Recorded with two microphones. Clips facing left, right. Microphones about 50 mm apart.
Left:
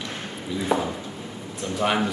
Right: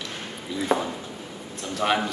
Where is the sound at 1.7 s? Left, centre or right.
Centre.